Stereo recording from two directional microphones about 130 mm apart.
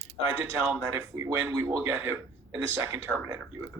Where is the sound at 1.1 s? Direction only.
20° right (ahead or behind).